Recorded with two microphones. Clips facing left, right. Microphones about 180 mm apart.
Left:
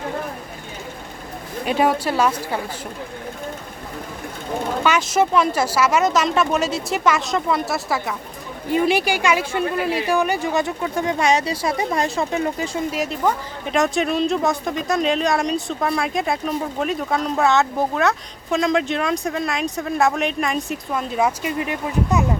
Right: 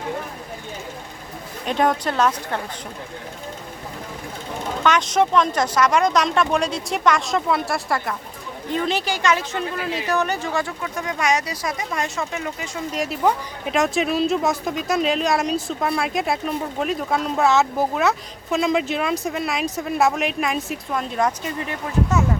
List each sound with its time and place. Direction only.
1.6 s a woman's voice: 5° left (ahead or behind)
4.8 s speech: 5° left (ahead or behind); by 12.8 s 35° left (ahead or behind)
12.9 s speech: centre (ahead or behind)